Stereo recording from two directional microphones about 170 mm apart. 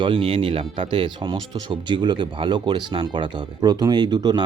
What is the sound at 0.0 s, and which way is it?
Speech, 30° right (ahead or behind).